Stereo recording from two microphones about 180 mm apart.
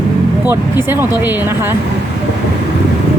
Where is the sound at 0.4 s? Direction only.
15° right (ahead or behind).